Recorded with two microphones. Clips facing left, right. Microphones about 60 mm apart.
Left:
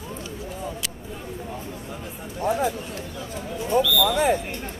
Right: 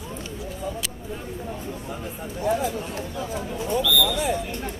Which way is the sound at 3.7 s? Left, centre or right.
Left.